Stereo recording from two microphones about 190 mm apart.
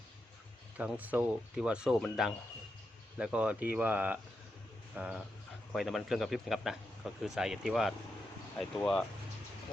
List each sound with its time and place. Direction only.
0.8 s a man's voice: 10° right (ahead or behind)